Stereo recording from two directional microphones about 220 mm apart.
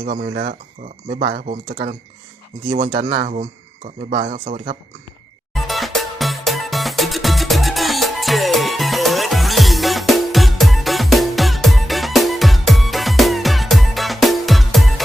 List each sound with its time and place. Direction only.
0.0 s speech: 40° right (ahead or behind)
2.7 s speech: 40° right (ahead or behind)
5.5 s music: centre (ahead or behind)